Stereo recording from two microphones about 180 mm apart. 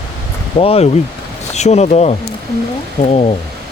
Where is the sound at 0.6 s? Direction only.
35° left (ahead or behind).